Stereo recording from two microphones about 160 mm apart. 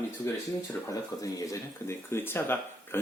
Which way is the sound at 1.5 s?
15° left (ahead or behind).